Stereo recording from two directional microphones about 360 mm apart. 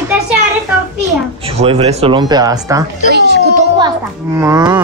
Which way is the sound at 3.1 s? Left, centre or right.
Right.